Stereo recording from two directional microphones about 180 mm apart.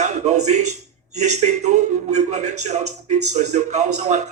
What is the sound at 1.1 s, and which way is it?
A man's voice, 40° right (ahead or behind).